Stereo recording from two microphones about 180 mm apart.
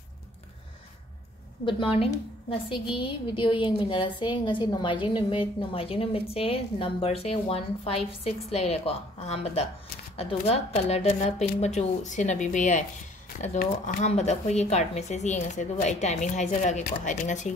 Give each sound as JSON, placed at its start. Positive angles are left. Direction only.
{"t": 1.7, "sound": "a woman's voice", "side_deg": 30}